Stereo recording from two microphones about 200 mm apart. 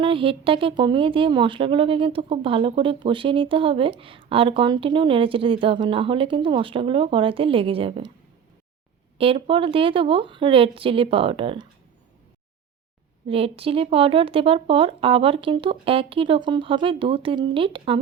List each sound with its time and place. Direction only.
0.0 s speech: 25° right (ahead or behind)
9.1 s speech: 30° right (ahead or behind)
13.2 s speech: 30° right (ahead or behind)